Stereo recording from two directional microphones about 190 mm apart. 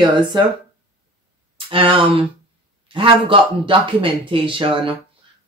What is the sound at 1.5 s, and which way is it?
Speech, 25° right (ahead or behind).